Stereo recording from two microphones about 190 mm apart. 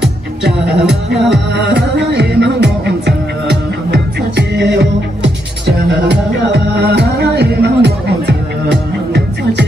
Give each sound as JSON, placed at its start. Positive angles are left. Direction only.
{"t": 0.4, "sound": "speech", "side_deg": -60}
{"t": 1.3, "sound": "music", "side_deg": -65}